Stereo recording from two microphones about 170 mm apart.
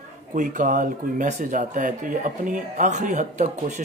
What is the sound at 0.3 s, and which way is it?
Speech, 50° right (ahead or behind).